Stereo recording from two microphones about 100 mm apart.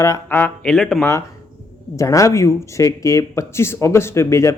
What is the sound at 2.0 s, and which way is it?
Speech, 30° left (ahead or behind).